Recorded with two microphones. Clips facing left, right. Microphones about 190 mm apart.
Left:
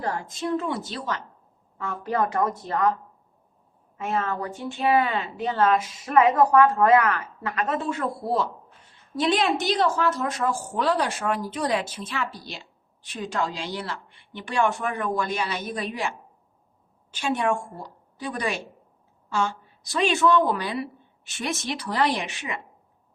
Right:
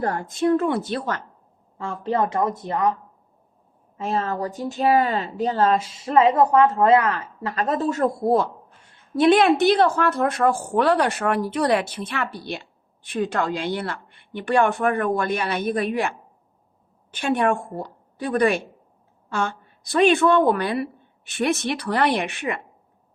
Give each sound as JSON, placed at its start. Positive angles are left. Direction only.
{"t": 0.0, "sound": "a woman's voice", "side_deg": -55}
{"t": 1.8, "sound": "a woman's voice", "side_deg": -30}
{"t": 3.9, "sound": "a woman's voice", "side_deg": -30}